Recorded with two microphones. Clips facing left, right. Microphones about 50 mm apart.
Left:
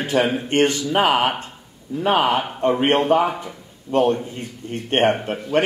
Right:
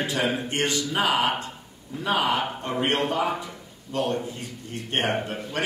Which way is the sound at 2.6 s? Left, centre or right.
Left.